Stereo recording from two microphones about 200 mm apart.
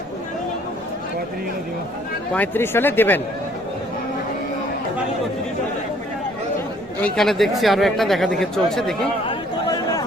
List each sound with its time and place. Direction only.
2.3 s speech: 10° left (ahead or behind)
7.0 s speech: centre (ahead or behind)
9.2 s chatter: 20° left (ahead or behind)